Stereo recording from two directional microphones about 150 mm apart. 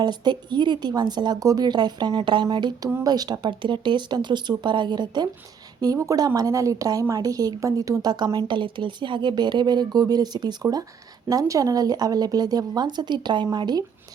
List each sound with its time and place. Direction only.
0.0 s a woman's voice: 30° right (ahead or behind)